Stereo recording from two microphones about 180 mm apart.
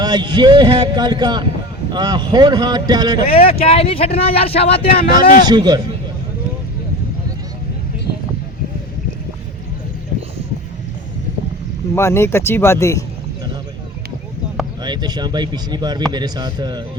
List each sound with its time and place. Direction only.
0.0 s speech: 25° right (ahead or behind)
3.3 s speech: 30° left (ahead or behind)
5.2 s a man's voice: 50° left (ahead or behind)
5.5 s speech: 25° right (ahead or behind)
11.9 s speech: 15° left (ahead or behind)
14.8 s speech: 25° right (ahead or behind)